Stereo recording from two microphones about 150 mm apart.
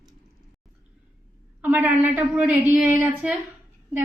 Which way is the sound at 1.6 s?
10° right (ahead or behind).